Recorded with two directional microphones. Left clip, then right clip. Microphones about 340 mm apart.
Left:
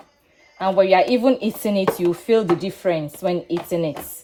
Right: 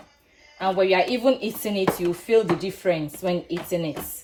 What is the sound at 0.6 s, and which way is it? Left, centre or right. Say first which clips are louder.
Speech: left 5 dB; left.